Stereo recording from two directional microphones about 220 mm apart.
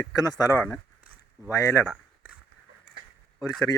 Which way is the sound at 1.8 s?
Centre (ahead or behind).